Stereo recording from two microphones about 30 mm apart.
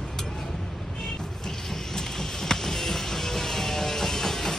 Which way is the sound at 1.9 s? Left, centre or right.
Centre.